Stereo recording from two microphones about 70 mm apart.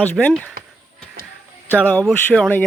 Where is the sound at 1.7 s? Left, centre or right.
Centre.